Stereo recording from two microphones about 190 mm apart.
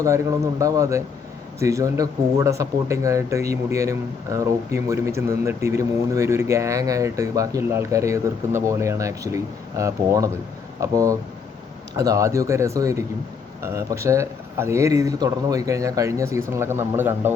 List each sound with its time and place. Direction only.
0.6 s speech: 15° right (ahead or behind)